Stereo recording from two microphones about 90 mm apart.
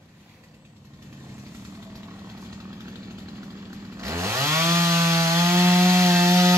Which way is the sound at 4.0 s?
35° right (ahead or behind).